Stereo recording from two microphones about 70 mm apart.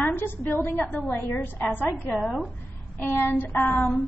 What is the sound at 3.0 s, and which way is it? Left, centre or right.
A woman's voice, left.